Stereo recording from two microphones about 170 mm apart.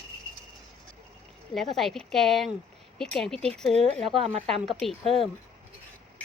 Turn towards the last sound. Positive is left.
turn(degrees=0)  # may be behind; listen again after turning